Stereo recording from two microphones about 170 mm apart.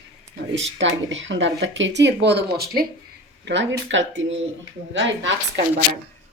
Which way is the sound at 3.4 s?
90° right.